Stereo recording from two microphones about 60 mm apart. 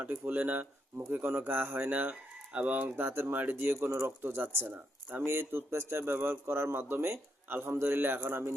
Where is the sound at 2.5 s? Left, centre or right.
Centre.